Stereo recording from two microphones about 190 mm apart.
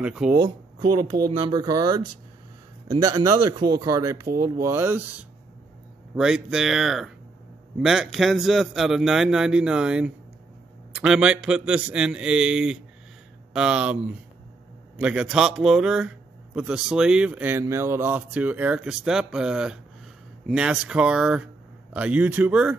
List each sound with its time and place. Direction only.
0.0 s a man's voice: 5° right (ahead or behind)
1.4 s a man's voice: 25° right (ahead or behind); by 22.8 s 5° right (ahead or behind)